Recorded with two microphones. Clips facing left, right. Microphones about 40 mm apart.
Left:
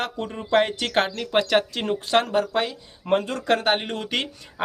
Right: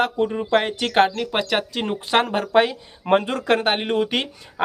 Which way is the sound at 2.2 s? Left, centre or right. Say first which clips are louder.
Right 5 dB; right.